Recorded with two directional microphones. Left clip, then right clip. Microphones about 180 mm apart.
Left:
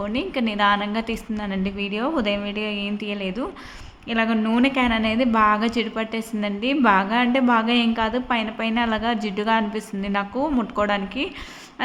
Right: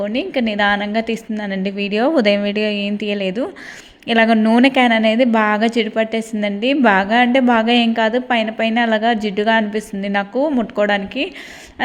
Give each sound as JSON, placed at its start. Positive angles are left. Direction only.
{"t": 0.0, "sound": "a woman's voice", "side_deg": -20}